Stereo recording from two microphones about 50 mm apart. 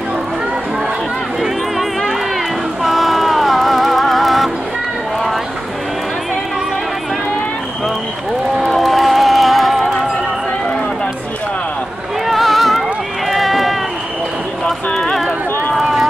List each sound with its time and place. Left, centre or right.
1.4 s run: centre
2.8 s music: centre
8.6 s music: centre
12.3 s a sound: centre
13.3 s run: centre
15.0 s a sound: centre
15.8 s run: centre